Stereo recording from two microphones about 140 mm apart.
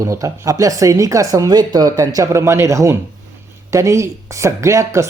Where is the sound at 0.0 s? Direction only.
20° right (ahead or behind).